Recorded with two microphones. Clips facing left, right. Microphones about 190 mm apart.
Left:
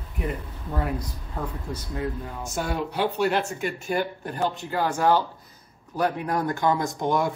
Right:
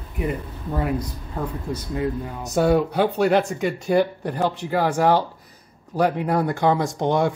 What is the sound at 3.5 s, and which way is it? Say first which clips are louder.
Speech: right 7 dB; 90° right.